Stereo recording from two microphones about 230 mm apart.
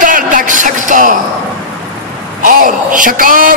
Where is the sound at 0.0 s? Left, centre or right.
Right.